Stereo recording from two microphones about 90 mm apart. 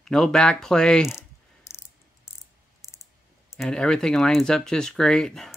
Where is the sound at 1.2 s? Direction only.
35° left (ahead or behind).